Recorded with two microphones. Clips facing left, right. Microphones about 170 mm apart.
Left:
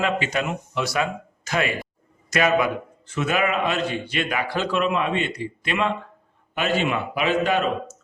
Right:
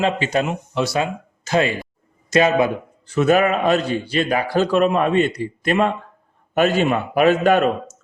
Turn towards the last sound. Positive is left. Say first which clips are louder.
# right 6 dB
turn(degrees=-50)  # may be behind; listen again after turning